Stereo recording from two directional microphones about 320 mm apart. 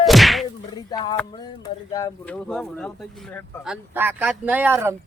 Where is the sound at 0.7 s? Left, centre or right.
Centre.